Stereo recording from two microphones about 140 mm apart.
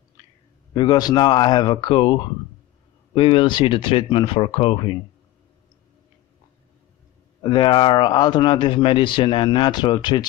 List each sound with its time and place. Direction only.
0.7 s a man's voice: 30° left (ahead or behind)
7.4 s a man's voice: 35° left (ahead or behind)